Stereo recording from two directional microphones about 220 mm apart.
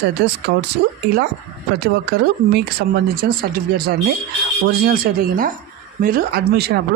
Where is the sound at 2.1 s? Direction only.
45° right (ahead or behind).